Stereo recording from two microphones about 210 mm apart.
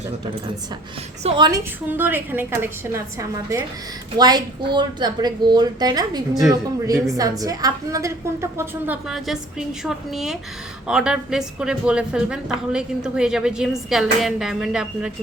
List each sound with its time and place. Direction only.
1.2 s a woman's voice: 25° right (ahead or behind); by 15.1 s 5° right (ahead or behind)